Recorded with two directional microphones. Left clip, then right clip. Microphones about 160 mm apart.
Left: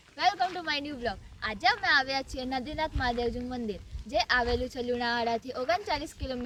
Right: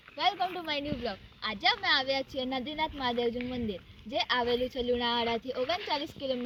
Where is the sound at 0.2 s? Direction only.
15° left (ahead or behind).